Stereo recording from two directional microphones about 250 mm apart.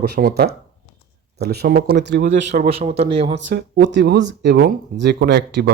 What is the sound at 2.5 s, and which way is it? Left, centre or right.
Speech, right.